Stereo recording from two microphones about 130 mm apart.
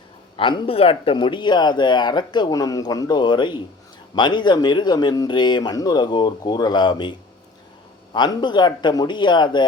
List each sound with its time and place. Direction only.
0.3 s speech: 40° left (ahead or behind)